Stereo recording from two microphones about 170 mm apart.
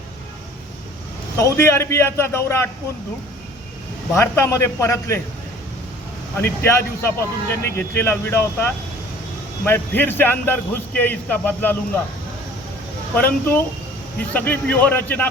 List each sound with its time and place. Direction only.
1.4 s a man's voice: 15° left (ahead or behind)
4.1 s a man's voice: 15° left (ahead or behind)
6.3 s a man's voice: 15° left (ahead or behind)
13.1 s a man's voice: 10° left (ahead or behind)